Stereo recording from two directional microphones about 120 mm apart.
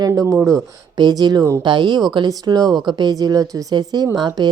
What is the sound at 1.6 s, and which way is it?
A woman's voice, 40° right (ahead or behind).